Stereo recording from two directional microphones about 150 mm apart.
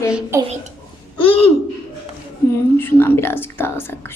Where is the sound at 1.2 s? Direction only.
40° left (ahead or behind).